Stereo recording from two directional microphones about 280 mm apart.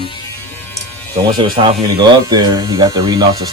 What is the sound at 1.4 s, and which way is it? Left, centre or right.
Speech, centre.